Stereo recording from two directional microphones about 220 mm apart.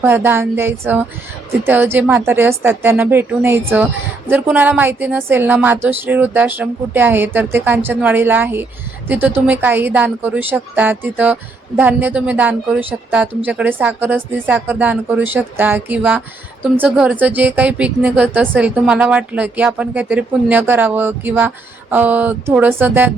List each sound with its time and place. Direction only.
0.0 s speech: 10° right (ahead or behind)